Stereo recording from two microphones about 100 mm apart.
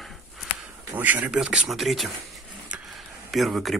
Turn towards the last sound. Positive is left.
turn(degrees=0)  # may be behind; listen again after turning